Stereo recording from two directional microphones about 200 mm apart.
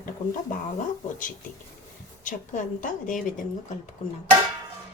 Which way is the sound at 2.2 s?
40° left (ahead or behind).